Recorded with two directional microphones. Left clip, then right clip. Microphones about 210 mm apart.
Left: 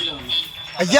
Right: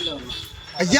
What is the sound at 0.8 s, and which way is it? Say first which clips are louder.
Speech: left 2 dB; centre (ahead or behind).